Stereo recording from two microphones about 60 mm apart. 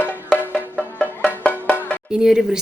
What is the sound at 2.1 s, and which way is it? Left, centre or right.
Speech, centre.